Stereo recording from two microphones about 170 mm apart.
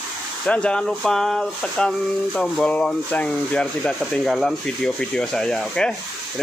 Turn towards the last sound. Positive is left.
turn(degrees=5)  # may be behind; listen again after turning